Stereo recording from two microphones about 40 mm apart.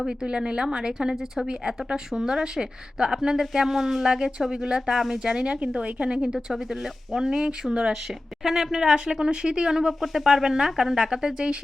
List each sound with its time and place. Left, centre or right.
0.0 s a woman's voice: centre
6.2 s speech: centre
8.4 s speech: centre
10.0 s speech: centre